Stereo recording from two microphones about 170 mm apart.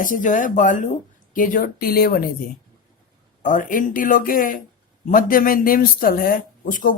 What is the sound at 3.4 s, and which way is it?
A woman's voice, 50° left (ahead or behind).